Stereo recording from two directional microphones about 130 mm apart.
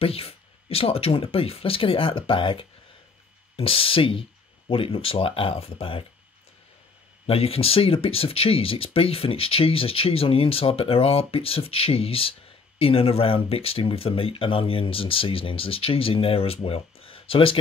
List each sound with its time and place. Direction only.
0.0 s speech: 50° left (ahead or behind)
7.2 s speech: 50° left (ahead or behind)